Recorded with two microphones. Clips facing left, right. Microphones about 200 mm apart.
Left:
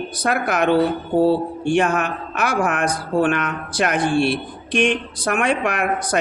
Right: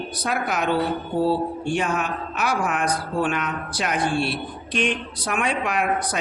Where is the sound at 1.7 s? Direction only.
50° left (ahead or behind).